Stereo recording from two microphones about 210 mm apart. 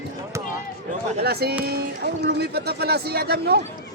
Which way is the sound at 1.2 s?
50° right (ahead or behind).